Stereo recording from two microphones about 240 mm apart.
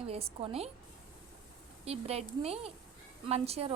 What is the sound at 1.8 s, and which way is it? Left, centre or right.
A woman's voice, right.